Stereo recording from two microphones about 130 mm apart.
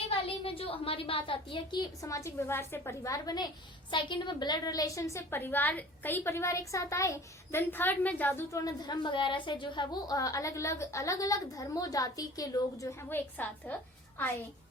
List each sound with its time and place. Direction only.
0.1 s a woman's voice: 45° left (ahead or behind); by 8.6 s 15° left (ahead or behind)
8.6 s a woman's voice: 35° left (ahead or behind); by 13.7 s 15° left (ahead or behind)